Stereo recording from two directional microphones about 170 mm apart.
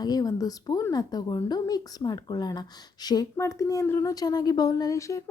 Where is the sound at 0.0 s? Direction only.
20° left (ahead or behind).